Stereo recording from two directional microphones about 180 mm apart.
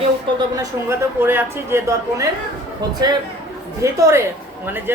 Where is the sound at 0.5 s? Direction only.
10° right (ahead or behind).